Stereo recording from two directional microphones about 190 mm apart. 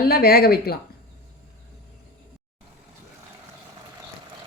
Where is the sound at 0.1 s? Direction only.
55° left (ahead or behind).